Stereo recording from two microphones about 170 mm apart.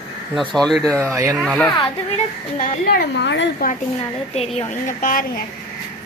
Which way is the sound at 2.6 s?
75° left (ahead or behind).